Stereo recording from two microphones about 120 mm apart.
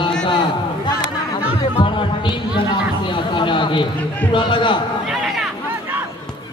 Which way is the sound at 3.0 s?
40° left (ahead or behind).